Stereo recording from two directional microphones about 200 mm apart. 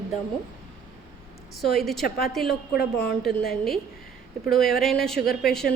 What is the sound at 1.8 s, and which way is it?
A woman's voice, centre (ahead or behind).